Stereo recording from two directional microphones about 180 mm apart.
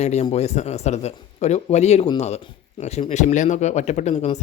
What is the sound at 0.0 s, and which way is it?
A man's voice, 40° left (ahead or behind).